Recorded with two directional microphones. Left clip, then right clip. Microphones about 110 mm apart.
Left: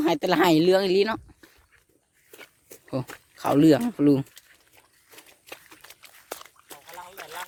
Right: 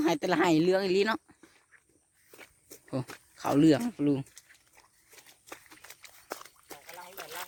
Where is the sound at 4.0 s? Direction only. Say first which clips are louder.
Left 8 dB; 65° left (ahead or behind).